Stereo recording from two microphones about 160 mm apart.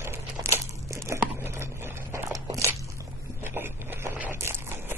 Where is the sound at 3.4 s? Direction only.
15° right (ahead or behind).